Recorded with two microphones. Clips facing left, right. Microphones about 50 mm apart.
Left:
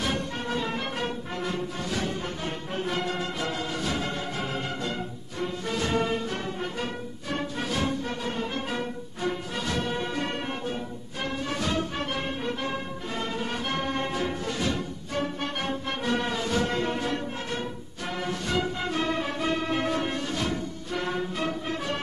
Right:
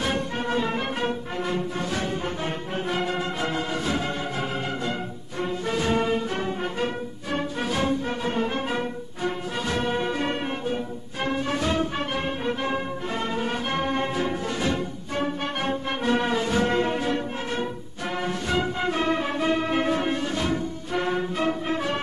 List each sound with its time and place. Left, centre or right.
0.0 s music: right
2.9 s music: centre
5.4 s music: right
7.3 s music: centre
8.2 s music: right